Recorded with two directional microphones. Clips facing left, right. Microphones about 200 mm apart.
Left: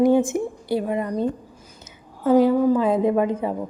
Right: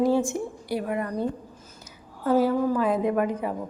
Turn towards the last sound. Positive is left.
turn(degrees=25)  # may be behind; listen again after turning